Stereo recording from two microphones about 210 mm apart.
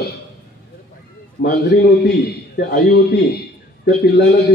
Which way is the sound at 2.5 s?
50° left (ahead or behind).